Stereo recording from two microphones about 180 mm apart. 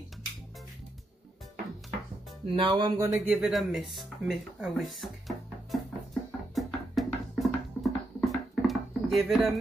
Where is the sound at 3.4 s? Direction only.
Centre (ahead or behind).